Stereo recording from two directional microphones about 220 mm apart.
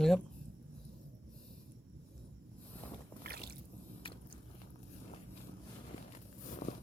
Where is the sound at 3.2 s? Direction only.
45° right (ahead or behind).